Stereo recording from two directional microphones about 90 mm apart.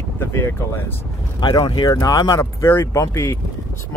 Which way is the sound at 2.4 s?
30° left (ahead or behind).